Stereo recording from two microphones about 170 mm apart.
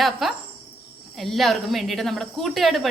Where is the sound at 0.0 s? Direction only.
Centre (ahead or behind).